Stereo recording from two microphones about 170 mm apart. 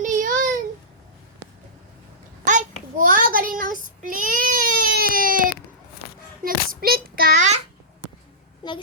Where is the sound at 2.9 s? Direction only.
50° right (ahead or behind).